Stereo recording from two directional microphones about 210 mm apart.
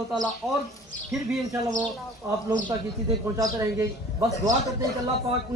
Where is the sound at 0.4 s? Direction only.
Centre (ahead or behind).